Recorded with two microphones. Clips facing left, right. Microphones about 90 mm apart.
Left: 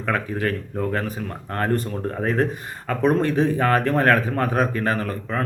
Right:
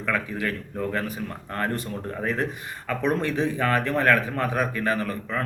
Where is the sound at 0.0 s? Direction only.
35° left (ahead or behind).